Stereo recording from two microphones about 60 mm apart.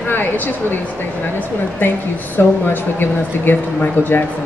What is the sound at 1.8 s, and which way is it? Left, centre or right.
Speech, left.